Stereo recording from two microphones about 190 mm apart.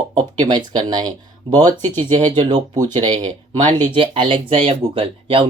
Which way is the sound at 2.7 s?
20° right (ahead or behind).